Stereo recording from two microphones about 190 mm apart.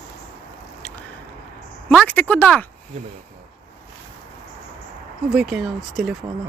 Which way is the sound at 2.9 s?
35° right (ahead or behind).